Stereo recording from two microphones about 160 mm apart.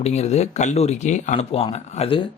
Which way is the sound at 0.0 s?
45° left (ahead or behind).